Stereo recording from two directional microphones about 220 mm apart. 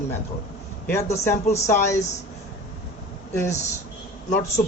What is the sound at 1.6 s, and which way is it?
Speech, 15° left (ahead or behind).